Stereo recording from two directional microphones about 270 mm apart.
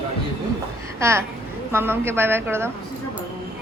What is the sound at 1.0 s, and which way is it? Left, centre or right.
Speech, centre.